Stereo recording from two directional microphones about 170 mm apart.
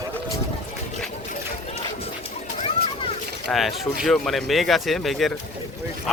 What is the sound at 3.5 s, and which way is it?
Speech, centre (ahead or behind).